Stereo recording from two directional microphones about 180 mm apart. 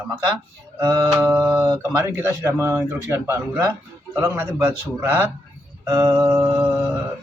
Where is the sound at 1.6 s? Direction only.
20° right (ahead or behind).